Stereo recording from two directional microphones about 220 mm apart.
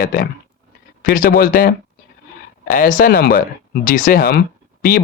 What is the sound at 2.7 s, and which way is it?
Speech, 40° left (ahead or behind).